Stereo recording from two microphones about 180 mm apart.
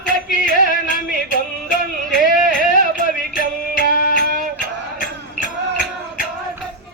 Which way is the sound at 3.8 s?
60° right (ahead or behind).